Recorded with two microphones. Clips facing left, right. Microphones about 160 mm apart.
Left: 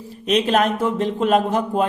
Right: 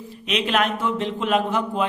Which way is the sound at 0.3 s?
40° left (ahead or behind).